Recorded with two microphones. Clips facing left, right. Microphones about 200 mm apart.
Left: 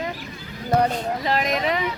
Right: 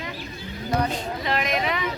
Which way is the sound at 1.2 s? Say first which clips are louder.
Left 1 dB; 35° left (ahead or behind).